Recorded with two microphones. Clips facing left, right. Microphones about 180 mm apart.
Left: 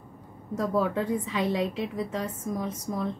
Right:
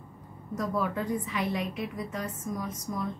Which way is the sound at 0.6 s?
30° left (ahead or behind).